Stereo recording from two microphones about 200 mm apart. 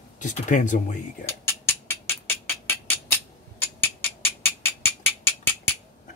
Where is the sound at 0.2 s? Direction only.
40° left (ahead or behind).